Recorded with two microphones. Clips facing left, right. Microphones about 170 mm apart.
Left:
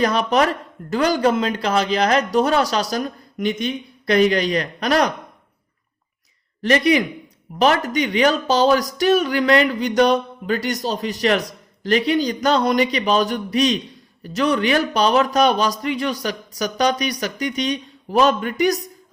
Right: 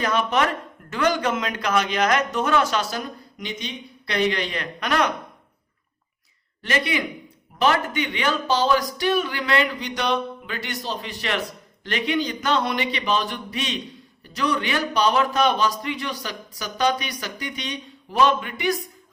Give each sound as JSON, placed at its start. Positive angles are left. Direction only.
{"t": 0.0, "sound": "speech", "side_deg": 35}
{"t": 6.6, "sound": "speech", "side_deg": 40}